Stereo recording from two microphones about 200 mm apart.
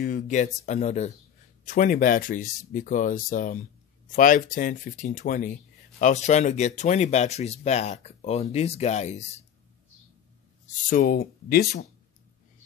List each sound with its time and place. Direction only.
0.0 s speech: 40° left (ahead or behind)
10.9 s speech: 45° left (ahead or behind)